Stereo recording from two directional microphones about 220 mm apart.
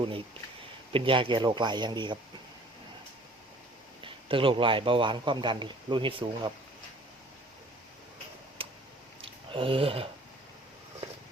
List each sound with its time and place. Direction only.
0.9 s a man's voice: 25° right (ahead or behind)
4.0 s a man's voice: 25° right (ahead or behind)
8.6 s a sound: 25° right (ahead or behind)